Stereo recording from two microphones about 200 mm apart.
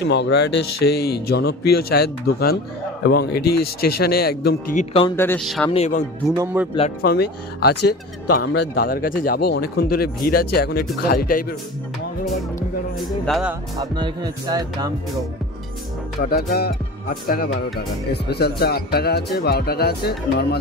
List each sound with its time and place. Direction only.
0.1 s speech: 60° left (ahead or behind)
4.7 s speech: 30° left (ahead or behind)
5.1 s speech: 10° left (ahead or behind)
5.7 s speech: 35° left (ahead or behind)
6.3 s speech: 10° right (ahead or behind)
7.0 s speech: 50° left (ahead or behind)
13.2 s speech: centre (ahead or behind)
13.7 s speech: 20° right (ahead or behind)
16.3 s speech: 50° left (ahead or behind)
18.1 s speech: 55° left (ahead or behind)